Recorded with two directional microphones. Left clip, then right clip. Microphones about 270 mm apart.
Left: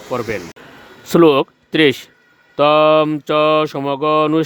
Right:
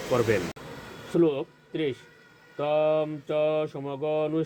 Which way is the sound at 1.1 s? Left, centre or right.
Left.